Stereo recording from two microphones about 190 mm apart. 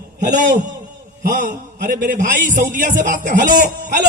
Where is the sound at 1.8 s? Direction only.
45° right (ahead or behind).